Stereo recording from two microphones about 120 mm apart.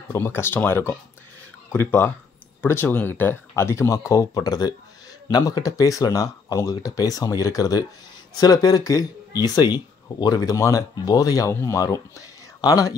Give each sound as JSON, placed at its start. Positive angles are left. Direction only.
{"t": 0.1, "sound": "speech", "side_deg": 20}